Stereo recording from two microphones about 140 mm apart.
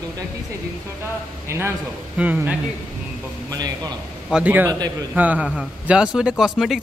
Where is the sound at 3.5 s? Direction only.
30° right (ahead or behind).